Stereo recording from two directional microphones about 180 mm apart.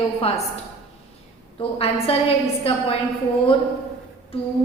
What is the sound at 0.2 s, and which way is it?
A woman's voice, 35° left (ahead or behind).